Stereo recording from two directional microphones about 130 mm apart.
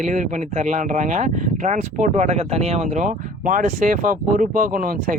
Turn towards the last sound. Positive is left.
turn(degrees=-90)